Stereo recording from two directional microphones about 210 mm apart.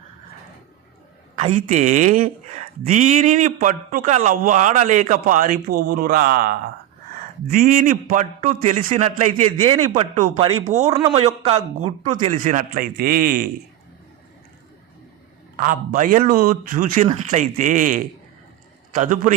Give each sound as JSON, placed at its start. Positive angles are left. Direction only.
{"t": 1.7, "sound": "speech", "side_deg": -35}
{"t": 10.8, "sound": "a man's voice", "side_deg": -15}
{"t": 11.1, "sound": "a man's voice", "side_deg": -30}
{"t": 12.3, "sound": "a man's voice", "side_deg": -35}
{"t": 15.5, "sound": "speech", "side_deg": -40}